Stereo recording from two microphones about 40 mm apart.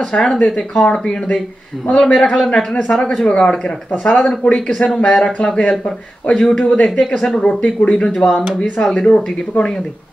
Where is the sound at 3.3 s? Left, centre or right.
Left.